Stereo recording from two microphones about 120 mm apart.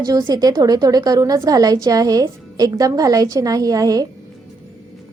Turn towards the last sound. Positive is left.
turn(degrees=-30)  # may be behind; listen again after turning